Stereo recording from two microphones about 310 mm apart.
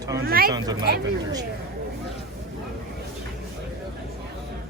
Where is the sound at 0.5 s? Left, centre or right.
Centre.